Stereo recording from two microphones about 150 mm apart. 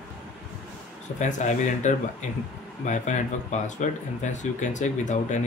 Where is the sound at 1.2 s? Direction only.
55° left (ahead or behind).